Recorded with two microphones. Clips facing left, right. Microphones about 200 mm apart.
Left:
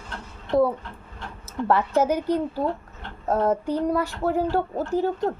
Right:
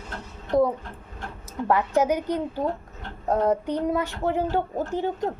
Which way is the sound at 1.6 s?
15° right (ahead or behind).